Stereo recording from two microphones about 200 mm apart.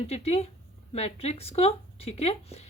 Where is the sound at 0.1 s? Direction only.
30° left (ahead or behind).